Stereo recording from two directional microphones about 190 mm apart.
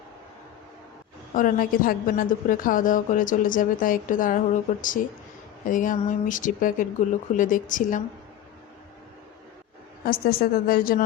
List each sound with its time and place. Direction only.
1.3 s a woman's voice: 45° left (ahead or behind)
10.0 s a woman's voice: 50° left (ahead or behind)